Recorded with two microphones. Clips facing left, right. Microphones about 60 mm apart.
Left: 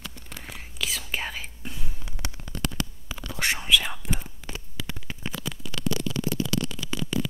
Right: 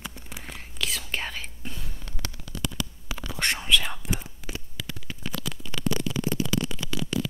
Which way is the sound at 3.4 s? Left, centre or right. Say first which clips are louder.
Left 1 dB; centre.